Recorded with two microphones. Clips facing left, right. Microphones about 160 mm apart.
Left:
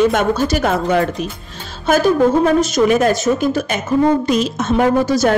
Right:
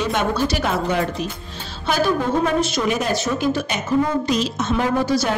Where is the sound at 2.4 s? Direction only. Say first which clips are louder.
Left 7 dB; 45° left (ahead or behind).